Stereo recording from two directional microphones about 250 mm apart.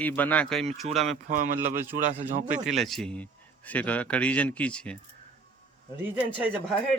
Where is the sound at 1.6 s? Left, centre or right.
Centre.